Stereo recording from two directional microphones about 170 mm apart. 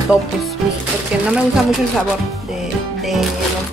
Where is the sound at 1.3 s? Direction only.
5° right (ahead or behind).